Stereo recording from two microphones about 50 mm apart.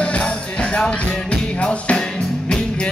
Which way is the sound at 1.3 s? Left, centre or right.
Left.